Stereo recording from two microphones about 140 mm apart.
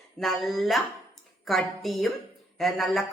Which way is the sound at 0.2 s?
Centre (ahead or behind).